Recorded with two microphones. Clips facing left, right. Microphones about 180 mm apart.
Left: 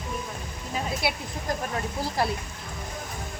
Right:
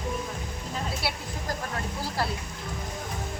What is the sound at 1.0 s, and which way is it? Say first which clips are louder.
Speech: left 5 dB; 15° left (ahead or behind).